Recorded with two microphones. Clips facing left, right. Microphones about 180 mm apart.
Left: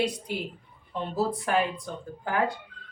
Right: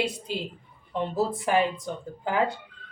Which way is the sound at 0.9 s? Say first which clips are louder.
Right 2 dB; 20° right (ahead or behind).